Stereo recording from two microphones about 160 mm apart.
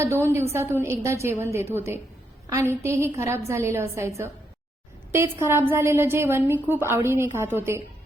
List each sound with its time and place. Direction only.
0.0 s a woman's voice: 15° right (ahead or behind)